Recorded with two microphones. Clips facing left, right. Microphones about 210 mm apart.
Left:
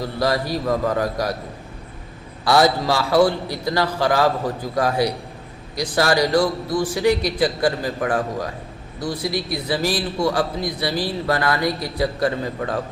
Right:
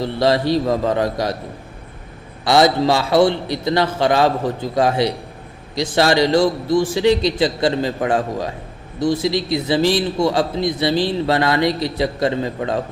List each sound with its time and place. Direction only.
0.0 s a man's voice: 25° right (ahead or behind)
2.4 s a man's voice: 20° right (ahead or behind)